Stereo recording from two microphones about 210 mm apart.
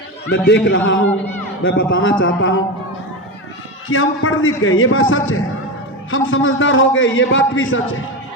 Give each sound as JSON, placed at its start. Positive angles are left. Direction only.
{"t": 0.3, "sound": "a man's voice", "side_deg": 55}
{"t": 3.8, "sound": "a man's voice", "side_deg": 75}